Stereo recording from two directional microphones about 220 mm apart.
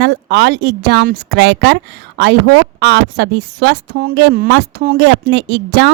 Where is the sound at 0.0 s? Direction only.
50° right (ahead or behind).